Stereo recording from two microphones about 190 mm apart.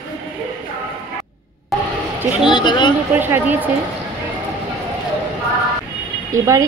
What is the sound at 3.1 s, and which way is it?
Speech, 10° right (ahead or behind).